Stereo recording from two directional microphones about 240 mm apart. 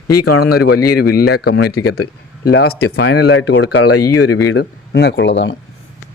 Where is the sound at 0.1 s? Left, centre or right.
Left.